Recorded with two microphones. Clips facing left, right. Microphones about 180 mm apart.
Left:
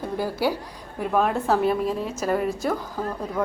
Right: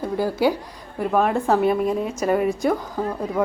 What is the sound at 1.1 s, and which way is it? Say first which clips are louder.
Speech: right 2 dB; 5° right (ahead or behind).